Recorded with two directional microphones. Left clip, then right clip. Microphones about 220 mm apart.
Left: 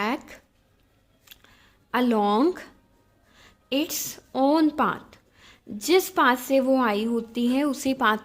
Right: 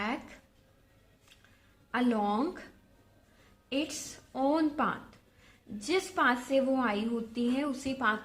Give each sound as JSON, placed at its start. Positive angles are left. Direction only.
{"t": 0.0, "sound": "a sound", "side_deg": 45}
{"t": 1.9, "sound": "speech", "side_deg": 45}
{"t": 3.7, "sound": "speech", "side_deg": 45}